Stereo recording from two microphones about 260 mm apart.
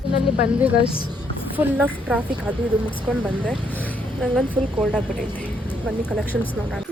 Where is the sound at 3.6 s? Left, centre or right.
Centre.